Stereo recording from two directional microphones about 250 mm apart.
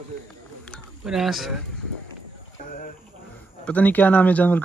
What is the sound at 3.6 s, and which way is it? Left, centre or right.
Speech, centre.